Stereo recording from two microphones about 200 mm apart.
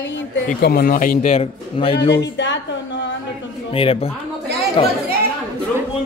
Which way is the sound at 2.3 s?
65° left (ahead or behind).